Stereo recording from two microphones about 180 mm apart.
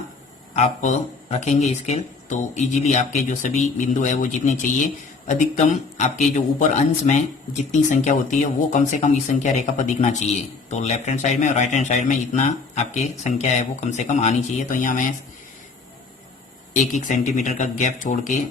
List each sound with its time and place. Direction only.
0.5 s a man's voice: 40° left (ahead or behind)
16.7 s speech: 40° left (ahead or behind)